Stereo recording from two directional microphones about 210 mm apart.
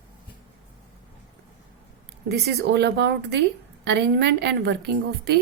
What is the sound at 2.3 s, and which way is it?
A woman's voice, 55° right (ahead or behind).